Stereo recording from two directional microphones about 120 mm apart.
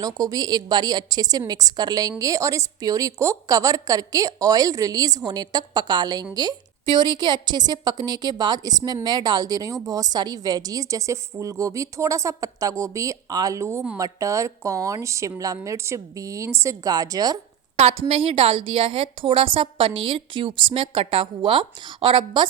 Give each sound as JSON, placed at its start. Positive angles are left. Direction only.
{"t": 0.0, "sound": "a woman's voice", "side_deg": -35}
{"t": 18.1, "sound": "a woman's voice", "side_deg": -50}